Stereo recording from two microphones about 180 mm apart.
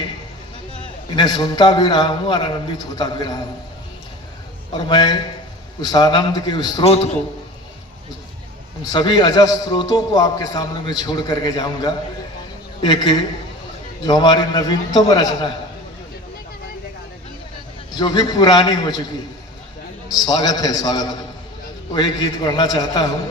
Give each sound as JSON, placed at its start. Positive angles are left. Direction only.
{"t": 1.1, "sound": "a man's voice", "side_deg": 25}
{"t": 4.9, "sound": "a man's voice", "side_deg": 25}
{"t": 6.8, "sound": "a man's voice", "side_deg": 35}
{"t": 8.8, "sound": "a man's voice", "side_deg": 25}
{"t": 17.9, "sound": "a man's voice", "side_deg": 25}
{"t": 20.2, "sound": "a man's voice", "side_deg": 20}